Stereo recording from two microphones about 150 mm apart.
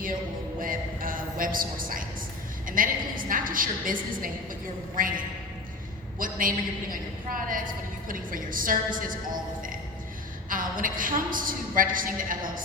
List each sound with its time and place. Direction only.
0.6 s a man's voice: 65° right (ahead or behind)
10.5 s a woman's voice: 65° right (ahead or behind)